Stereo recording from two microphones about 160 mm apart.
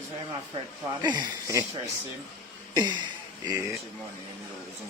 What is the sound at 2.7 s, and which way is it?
Speech, 25° right (ahead or behind).